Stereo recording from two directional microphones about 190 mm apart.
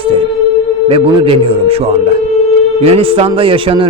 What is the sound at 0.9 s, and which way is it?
A man's voice, 30° right (ahead or behind).